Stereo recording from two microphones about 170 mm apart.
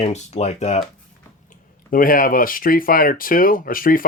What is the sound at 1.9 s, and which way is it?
Speech, 55° left (ahead or behind).